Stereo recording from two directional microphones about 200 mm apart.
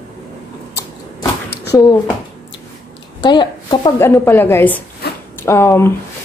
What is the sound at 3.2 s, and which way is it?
Speech, 20° left (ahead or behind).